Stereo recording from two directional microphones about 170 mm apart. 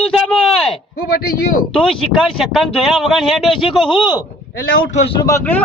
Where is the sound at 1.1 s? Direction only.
65° left (ahead or behind).